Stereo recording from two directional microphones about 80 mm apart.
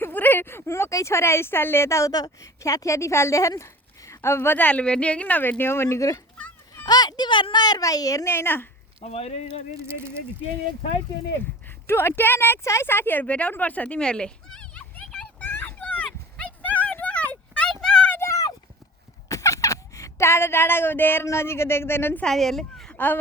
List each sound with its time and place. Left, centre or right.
0.0 s speech: left
2.1 s speech: left
6.8 s speech: left
8.3 s speech: left
11.9 s speech: left; by 15.0 s centre
15.0 s a sound: centre
15.4 s dog: left; by 18.1 s centre
18.2 s a sound: left
21.2 s speech: left
22.2 s speech: centre
22.9 s a sound: left